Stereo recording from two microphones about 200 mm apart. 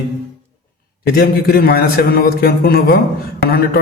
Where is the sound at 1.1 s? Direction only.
50° left (ahead or behind).